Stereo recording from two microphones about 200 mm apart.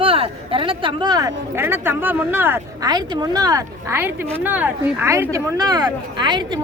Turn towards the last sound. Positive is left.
turn(degrees=-25)  # may be behind; listen again after turning